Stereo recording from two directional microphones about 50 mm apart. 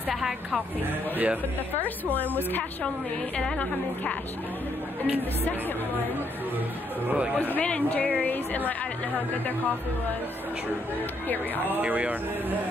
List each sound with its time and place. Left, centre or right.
0.1 s a woman's voice: centre
1.1 s a man's voice: right
2.1 s speech: left
3.3 s speech: centre
7.3 s speech: left
11.6 s a man's voice: right